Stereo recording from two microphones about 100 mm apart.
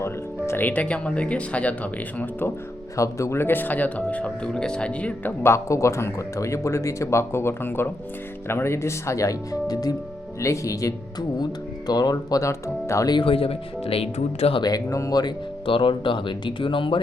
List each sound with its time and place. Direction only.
0.0 s speech: 25° left (ahead or behind)
2.9 s speech: 30° left (ahead or behind); by 5.3 s 15° left (ahead or behind)
5.4 s a man's voice: 30° left (ahead or behind)
13.2 s speech: 70° left (ahead or behind)
14.6 s speech: 35° left (ahead or behind)
15.6 s speech: 60° left (ahead or behind)